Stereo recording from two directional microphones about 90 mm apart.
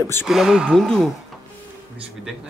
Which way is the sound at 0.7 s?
5° left (ahead or behind).